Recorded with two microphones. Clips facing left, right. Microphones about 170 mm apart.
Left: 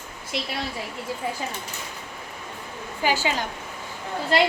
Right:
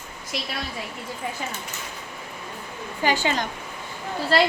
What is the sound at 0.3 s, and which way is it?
Speech, 25° left (ahead or behind).